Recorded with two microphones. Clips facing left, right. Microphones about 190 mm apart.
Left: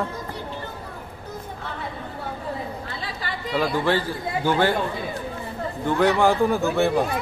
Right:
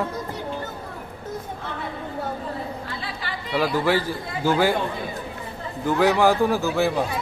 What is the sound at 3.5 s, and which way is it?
A man's voice, 5° right (ahead or behind).